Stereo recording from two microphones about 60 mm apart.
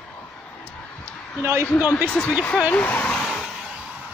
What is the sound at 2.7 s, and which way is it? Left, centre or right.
Speech, left.